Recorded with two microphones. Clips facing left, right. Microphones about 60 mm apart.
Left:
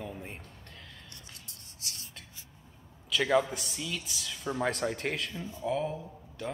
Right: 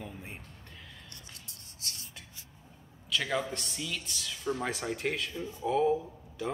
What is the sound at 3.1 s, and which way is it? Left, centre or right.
Speech, centre.